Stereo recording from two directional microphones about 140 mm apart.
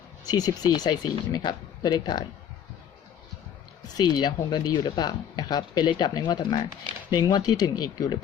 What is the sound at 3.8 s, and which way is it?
Speech, 30° left (ahead or behind).